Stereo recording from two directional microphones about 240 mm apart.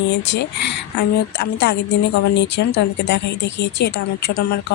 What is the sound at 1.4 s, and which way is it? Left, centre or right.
Speech, left.